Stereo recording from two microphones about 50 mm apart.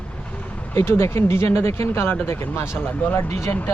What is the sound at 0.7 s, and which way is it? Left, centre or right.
Speech, left.